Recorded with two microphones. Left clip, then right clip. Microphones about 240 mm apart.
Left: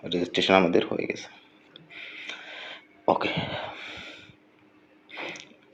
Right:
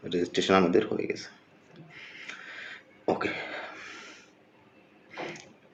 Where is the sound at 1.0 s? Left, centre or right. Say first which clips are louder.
Left 2 dB; right.